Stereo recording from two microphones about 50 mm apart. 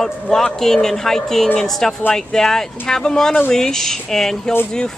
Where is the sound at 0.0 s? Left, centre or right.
Centre.